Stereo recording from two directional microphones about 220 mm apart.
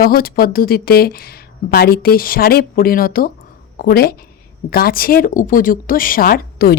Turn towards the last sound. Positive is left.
turn(degrees=45)  # may be behind; listen again after turning